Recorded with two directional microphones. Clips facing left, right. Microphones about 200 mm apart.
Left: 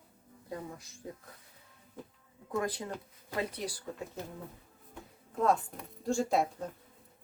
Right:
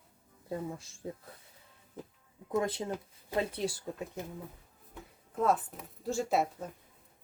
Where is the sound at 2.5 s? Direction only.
25° right (ahead or behind).